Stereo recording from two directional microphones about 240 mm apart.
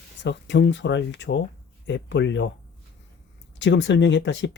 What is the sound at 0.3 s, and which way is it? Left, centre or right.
Speech, left.